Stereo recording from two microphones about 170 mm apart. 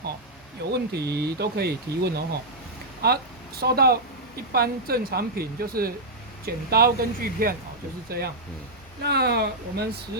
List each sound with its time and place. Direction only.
0.7 s speech: 75° right (ahead or behind)